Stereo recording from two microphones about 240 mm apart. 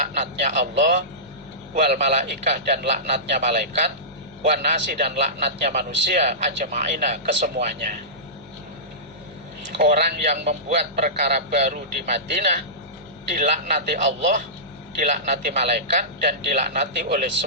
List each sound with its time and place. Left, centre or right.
0.0 s a man's voice: right
9.8 s a man's voice: right